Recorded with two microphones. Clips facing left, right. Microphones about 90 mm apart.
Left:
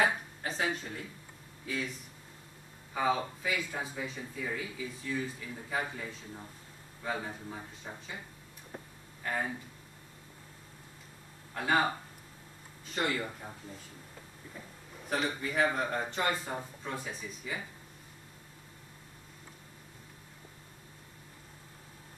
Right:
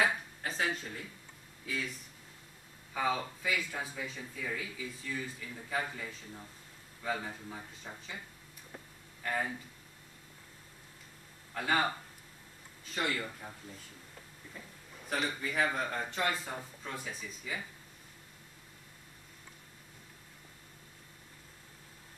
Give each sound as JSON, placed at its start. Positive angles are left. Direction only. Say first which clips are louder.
{"t": 0.0, "sound": "a sound", "louder": "left 2 dB", "side_deg": 5}
{"t": 2.9, "sound": "a man's voice", "louder": "left 3 dB", "side_deg": 10}
{"t": 8.7, "sound": "vehicle", "louder": "left 4 dB", "side_deg": 25}
{"t": 9.2, "sound": "speech", "louder": "even", "side_deg": 5}
{"t": 11.5, "sound": "speech", "louder": "left 2 dB", "side_deg": 10}
{"t": 12.9, "sound": "speech", "louder": "left 2 dB", "side_deg": 5}
{"t": 15.0, "sound": "a man's voice", "louder": "left 2 dB", "side_deg": 5}